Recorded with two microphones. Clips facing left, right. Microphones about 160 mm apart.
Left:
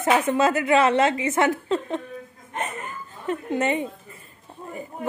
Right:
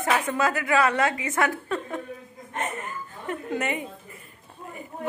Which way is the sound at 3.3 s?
25° left (ahead or behind).